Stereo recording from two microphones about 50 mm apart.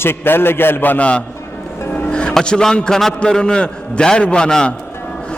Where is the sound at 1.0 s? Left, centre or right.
Left.